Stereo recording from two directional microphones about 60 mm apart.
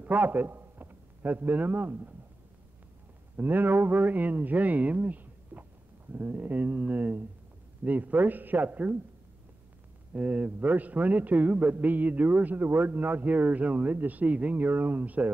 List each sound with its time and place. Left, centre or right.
0.0 s a man's voice: right
3.3 s a man's voice: right
10.1 s a man's voice: right